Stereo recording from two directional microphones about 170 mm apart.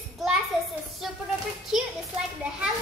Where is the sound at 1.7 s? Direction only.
5° right (ahead or behind).